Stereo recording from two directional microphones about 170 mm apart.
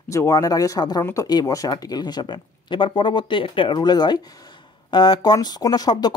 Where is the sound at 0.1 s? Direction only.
20° left (ahead or behind).